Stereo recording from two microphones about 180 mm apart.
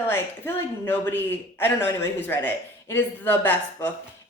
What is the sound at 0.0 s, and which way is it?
Speech, 10° left (ahead or behind).